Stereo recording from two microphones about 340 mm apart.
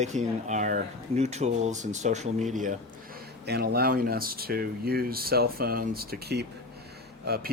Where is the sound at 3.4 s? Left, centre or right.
Right.